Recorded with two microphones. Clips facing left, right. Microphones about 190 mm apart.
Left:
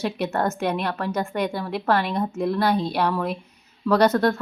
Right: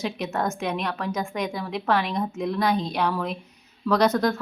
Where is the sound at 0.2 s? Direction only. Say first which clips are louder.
Left 3 dB; 5° left (ahead or behind).